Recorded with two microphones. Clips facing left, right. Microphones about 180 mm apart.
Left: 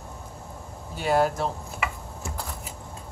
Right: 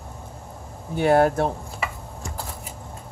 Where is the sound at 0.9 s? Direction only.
60° right (ahead or behind).